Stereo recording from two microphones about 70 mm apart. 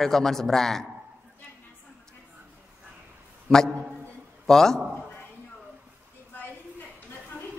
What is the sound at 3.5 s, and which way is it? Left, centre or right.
A man's voice, centre.